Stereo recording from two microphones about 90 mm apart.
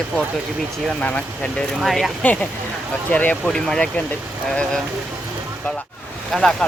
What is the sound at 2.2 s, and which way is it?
Speech, 15° left (ahead or behind).